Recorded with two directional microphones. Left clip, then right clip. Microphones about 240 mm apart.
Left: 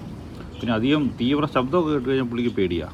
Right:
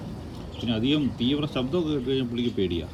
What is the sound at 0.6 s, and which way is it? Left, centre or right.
Speech, left.